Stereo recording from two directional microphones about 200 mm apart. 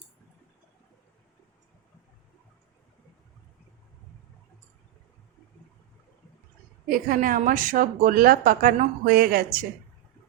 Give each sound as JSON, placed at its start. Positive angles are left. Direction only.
{"t": 6.8, "sound": "a woman's voice", "side_deg": -45}